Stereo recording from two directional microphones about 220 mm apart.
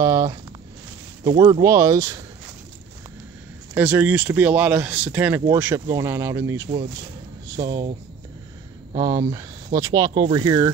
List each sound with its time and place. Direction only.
0.0 s speech: 15° right (ahead or behind)
3.7 s speech: 10° right (ahead or behind)
8.9 s speech: 15° right (ahead or behind)